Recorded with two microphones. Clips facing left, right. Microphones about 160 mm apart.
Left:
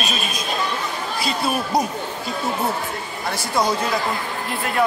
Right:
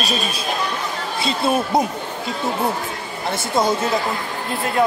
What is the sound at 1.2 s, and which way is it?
Speech, 25° right (ahead or behind).